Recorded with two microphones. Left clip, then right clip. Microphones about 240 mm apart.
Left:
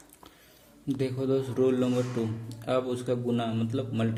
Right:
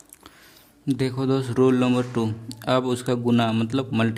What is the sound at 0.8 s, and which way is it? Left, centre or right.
Speech, right.